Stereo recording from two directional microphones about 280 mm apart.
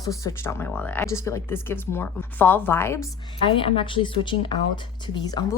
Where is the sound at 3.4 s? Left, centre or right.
Centre.